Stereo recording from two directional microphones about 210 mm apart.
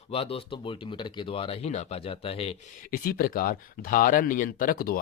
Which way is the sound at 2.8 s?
45° left (ahead or behind).